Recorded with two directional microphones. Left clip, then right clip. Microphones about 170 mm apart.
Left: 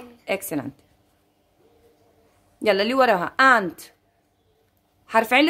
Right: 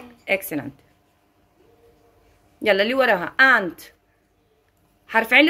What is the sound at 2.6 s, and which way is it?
A woman's voice, 25° left (ahead or behind).